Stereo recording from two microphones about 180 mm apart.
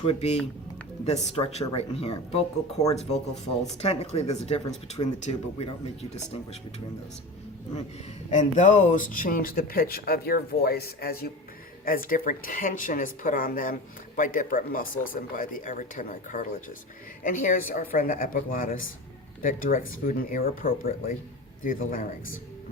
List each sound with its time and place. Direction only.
0.0 s speech: 35° left (ahead or behind)
8.3 s speech: 45° left (ahead or behind)